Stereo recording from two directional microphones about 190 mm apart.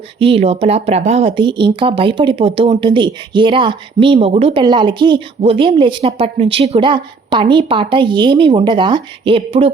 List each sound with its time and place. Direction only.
0.2 s speech: 30° right (ahead or behind)